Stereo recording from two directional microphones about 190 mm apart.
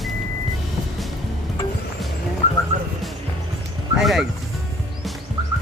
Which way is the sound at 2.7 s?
35° right (ahead or behind).